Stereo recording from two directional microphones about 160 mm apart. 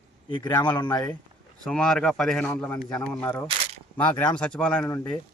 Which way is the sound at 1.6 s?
5° left (ahead or behind).